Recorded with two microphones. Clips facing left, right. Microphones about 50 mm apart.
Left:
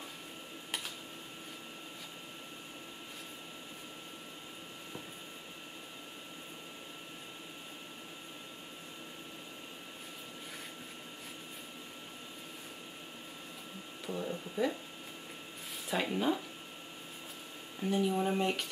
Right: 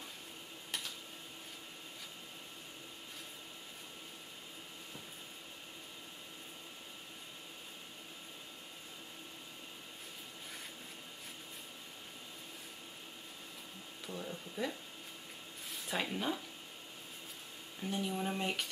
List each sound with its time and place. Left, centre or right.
14.0 s a sound: centre
15.9 s speech: centre
17.8 s speech: centre